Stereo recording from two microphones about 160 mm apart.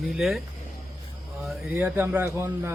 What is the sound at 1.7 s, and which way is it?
A man's voice, 10° right (ahead or behind).